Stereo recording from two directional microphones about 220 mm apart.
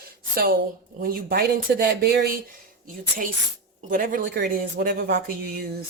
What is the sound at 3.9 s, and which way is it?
Speech, 40° right (ahead or behind).